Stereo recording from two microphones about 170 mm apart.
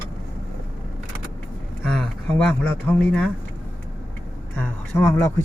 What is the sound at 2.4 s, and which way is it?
Speech, 5° left (ahead or behind).